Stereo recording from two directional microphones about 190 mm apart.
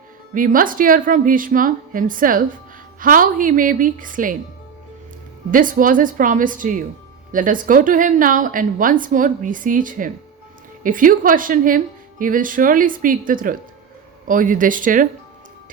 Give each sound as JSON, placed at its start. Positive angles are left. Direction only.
{"t": 0.3, "sound": "a woman's voice", "side_deg": -45}
{"t": 5.5, "sound": "a woman's voice", "side_deg": -45}